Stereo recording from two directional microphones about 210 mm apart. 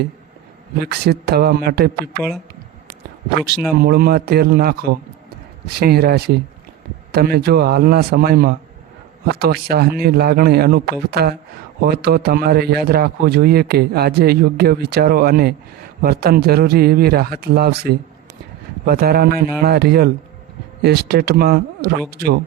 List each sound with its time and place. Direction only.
0.8 s a man's voice: 50° right (ahead or behind)
3.8 s a man's voice: 45° right (ahead or behind)